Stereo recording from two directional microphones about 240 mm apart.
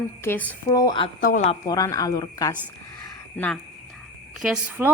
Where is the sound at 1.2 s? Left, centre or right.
Left; by 2.5 s centre.